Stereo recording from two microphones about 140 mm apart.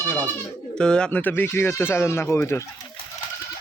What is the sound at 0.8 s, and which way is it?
Speech, 5° left (ahead or behind).